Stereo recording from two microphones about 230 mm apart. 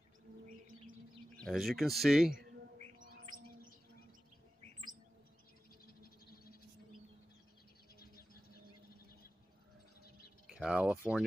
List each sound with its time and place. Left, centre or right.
0.5 s bird: right
1.3 s speech: centre
2.8 s bird: right
5.9 s a sound: left
10.5 s speech: centre